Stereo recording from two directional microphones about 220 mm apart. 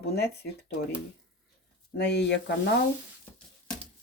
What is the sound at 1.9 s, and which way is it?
Speech, 50° left (ahead or behind).